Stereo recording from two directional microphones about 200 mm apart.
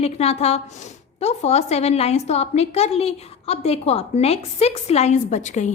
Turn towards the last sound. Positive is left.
turn(degrees=35)  # may be behind; listen again after turning